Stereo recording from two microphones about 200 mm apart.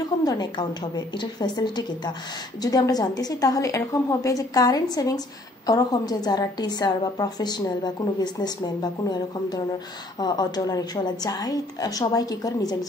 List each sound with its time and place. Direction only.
0.2 s a woman's voice: 20° left (ahead or behind)